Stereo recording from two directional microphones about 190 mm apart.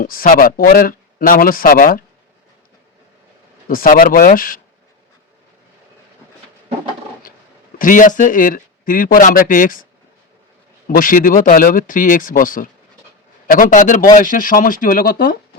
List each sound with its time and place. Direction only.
0.0 s speech: 50° left (ahead or behind)
3.7 s speech: 50° left (ahead or behind)
7.8 s speech: 45° left (ahead or behind)
10.8 s speech: 45° left (ahead or behind)